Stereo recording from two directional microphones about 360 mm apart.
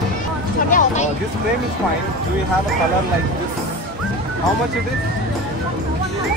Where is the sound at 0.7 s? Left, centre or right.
Left.